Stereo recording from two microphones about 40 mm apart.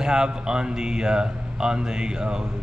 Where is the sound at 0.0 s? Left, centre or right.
Centre.